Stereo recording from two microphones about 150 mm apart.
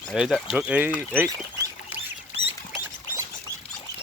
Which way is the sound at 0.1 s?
Centre (ahead or behind).